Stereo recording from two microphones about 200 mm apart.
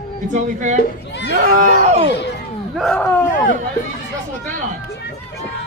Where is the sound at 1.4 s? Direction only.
40° right (ahead or behind).